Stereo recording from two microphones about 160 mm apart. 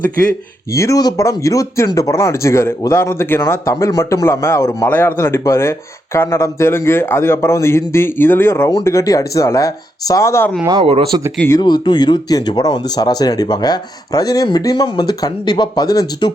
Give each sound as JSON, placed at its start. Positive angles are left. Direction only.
{"t": 0.7, "sound": "speech", "side_deg": 20}
{"t": 10.7, "sound": "speech", "side_deg": -35}
{"t": 11.5, "sound": "speech", "side_deg": 25}